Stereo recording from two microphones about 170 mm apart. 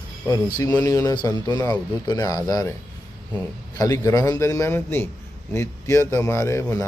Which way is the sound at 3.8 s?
20° left (ahead or behind).